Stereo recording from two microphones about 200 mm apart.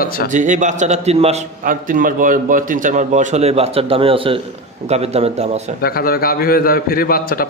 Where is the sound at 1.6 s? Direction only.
45° right (ahead or behind).